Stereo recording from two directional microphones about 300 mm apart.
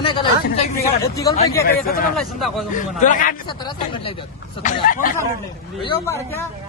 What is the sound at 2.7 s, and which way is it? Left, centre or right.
Speech, left.